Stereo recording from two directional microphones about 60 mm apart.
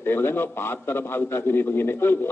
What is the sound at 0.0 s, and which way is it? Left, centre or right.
A man's voice, left.